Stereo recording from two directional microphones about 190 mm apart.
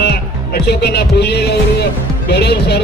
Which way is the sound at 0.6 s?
60° left (ahead or behind).